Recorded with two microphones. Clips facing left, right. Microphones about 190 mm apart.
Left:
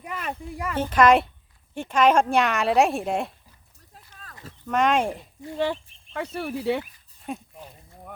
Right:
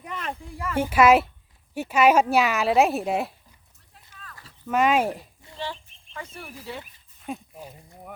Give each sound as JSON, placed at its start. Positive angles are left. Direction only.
{"t": 0.1, "sound": "a sound", "side_deg": 10}
{"t": 0.5, "sound": "speech", "side_deg": 15}
{"t": 0.8, "sound": "a child's voice", "side_deg": -10}
{"t": 3.9, "sound": "a sound", "side_deg": 40}
{"t": 4.6, "sound": "a woman's voice", "side_deg": -5}
{"t": 5.5, "sound": "speech", "side_deg": 65}
{"t": 7.3, "sound": "speech", "side_deg": 0}